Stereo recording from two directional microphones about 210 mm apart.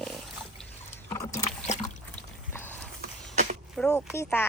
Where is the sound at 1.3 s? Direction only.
30° left (ahead or behind).